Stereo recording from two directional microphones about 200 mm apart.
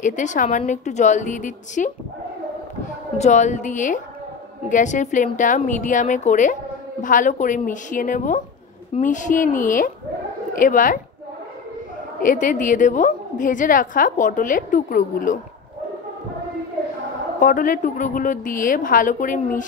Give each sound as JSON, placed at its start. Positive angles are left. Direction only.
{"t": 0.0, "sound": "a woman's voice", "side_deg": 40}
{"t": 3.2, "sound": "a woman's voice", "side_deg": 35}
{"t": 12.2, "sound": "a woman's voice", "side_deg": 40}
{"t": 17.4, "sound": "a woman's voice", "side_deg": 45}